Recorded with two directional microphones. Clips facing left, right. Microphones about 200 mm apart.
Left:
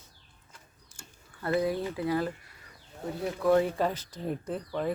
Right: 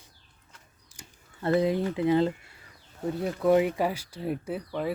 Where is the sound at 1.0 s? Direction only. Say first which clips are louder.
Right 3 dB; 25° right (ahead or behind).